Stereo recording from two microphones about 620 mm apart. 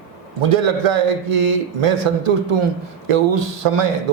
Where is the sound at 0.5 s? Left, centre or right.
Right.